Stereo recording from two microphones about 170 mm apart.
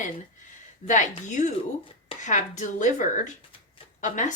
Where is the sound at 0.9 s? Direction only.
45° left (ahead or behind).